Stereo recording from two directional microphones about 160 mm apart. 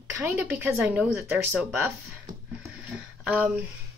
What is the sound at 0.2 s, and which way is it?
Speech, 10° right (ahead or behind).